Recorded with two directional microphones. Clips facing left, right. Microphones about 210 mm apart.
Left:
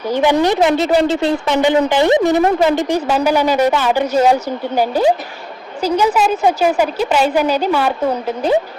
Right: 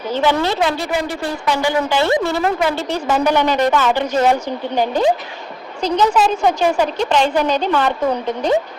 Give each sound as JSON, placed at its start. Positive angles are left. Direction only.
{"t": 0.1, "sound": "a woman's voice", "side_deg": 15}